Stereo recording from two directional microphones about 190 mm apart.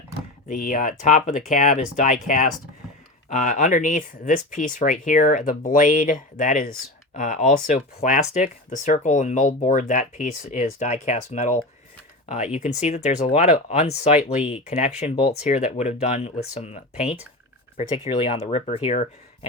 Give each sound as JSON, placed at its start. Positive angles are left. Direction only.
{"t": 0.4, "sound": "speech", "side_deg": 45}
{"t": 14.2, "sound": "speech", "side_deg": -5}
{"t": 14.7, "sound": "speech", "side_deg": 40}